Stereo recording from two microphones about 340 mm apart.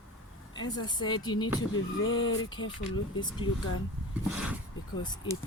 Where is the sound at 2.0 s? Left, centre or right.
Left.